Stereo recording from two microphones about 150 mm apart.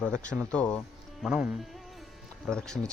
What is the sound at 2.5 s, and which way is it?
Speech, 5° left (ahead or behind).